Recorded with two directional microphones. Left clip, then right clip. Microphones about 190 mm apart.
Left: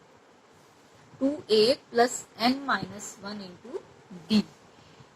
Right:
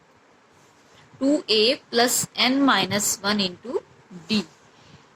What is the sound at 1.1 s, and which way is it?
A woman's voice, 15° right (ahead or behind).